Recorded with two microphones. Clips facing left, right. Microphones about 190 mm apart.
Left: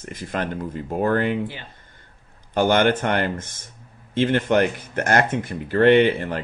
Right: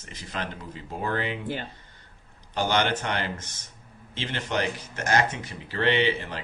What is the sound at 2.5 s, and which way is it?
Speech, 55° left (ahead or behind).